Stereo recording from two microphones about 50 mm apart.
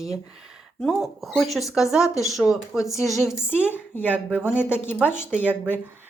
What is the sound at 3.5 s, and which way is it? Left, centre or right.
Speech, right.